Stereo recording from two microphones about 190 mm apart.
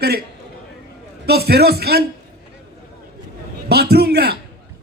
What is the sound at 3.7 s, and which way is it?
Speech, 55° right (ahead or behind).